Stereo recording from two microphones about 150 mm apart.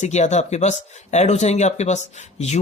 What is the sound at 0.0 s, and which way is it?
Speech, 50° left (ahead or behind).